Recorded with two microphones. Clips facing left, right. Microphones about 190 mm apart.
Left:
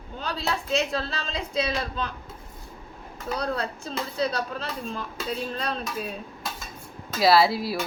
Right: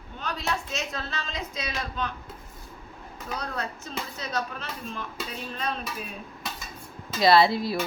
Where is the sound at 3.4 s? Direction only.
35° left (ahead or behind).